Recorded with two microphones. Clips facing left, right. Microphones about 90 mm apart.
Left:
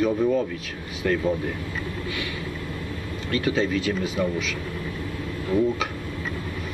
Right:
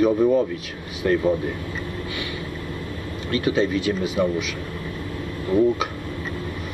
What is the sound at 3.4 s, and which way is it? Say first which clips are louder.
Speech: right 3 dB; 10° right (ahead or behind).